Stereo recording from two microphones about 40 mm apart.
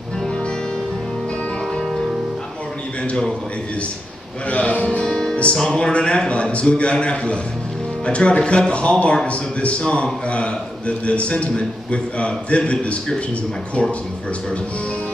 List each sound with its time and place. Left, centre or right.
4.5 s speech: left
5.0 s music: centre
5.8 s a man's voice: left